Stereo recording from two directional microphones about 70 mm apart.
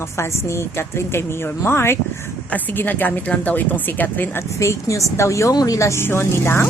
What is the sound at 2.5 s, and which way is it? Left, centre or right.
A woman's voice, left.